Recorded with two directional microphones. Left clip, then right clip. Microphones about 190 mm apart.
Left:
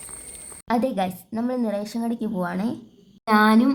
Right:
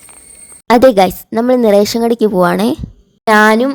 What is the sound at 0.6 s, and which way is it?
Speech, 55° right (ahead or behind).